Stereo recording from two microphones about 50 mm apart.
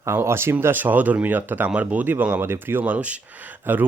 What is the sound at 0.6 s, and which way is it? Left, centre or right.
Speech, right.